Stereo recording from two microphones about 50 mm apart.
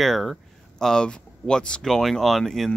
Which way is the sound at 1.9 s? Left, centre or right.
Centre.